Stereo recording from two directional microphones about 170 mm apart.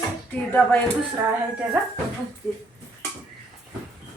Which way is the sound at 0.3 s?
5° left (ahead or behind).